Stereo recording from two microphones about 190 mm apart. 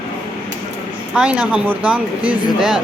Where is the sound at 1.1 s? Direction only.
5° right (ahead or behind).